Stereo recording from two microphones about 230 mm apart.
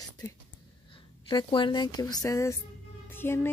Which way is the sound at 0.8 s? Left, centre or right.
Left.